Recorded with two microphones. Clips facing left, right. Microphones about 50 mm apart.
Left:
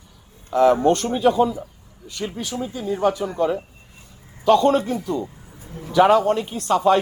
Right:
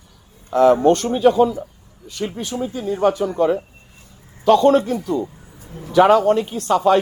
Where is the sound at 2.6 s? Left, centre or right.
Centre.